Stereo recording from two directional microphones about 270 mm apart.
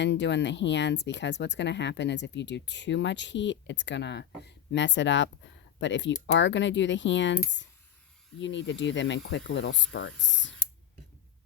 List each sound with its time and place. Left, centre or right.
0.0 s speech: left